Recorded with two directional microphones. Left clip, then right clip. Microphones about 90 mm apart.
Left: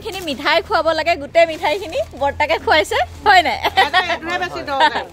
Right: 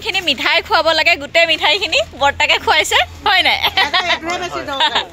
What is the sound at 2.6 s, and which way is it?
Speech, 50° left (ahead or behind).